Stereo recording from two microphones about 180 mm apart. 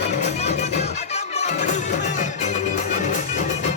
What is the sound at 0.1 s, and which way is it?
Music, 40° left (ahead or behind).